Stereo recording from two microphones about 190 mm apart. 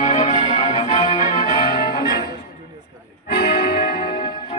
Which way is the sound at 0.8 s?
40° left (ahead or behind).